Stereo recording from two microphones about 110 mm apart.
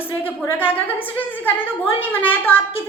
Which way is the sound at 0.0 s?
20° left (ahead or behind).